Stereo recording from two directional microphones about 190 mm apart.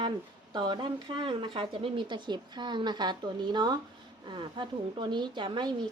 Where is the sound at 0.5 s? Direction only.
25° right (ahead or behind).